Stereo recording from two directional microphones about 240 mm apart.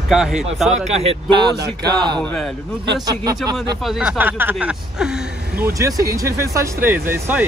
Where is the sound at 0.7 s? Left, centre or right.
Right.